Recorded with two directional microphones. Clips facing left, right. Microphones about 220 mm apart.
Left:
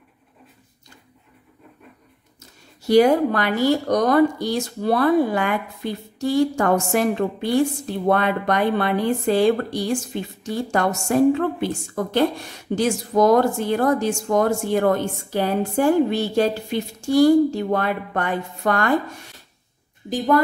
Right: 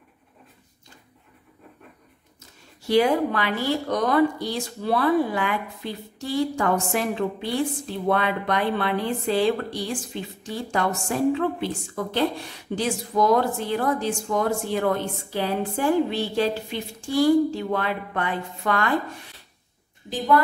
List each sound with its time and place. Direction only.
2.9 s speech: 45° left (ahead or behind)
20.1 s speech: 45° left (ahead or behind)